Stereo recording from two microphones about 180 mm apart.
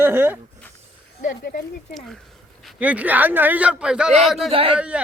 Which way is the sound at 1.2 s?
55° left (ahead or behind).